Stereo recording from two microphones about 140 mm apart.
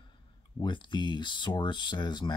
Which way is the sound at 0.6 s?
35° left (ahead or behind).